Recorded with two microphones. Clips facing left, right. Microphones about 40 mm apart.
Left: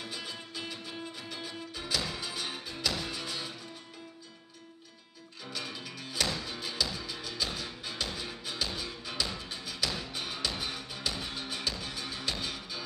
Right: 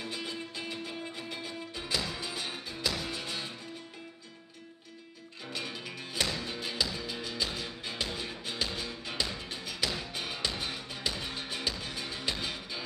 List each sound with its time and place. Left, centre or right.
0.0 s music: centre
2.0 s music: centre
3.1 s music: centre
5.4 s music: centre
6.4 s music: centre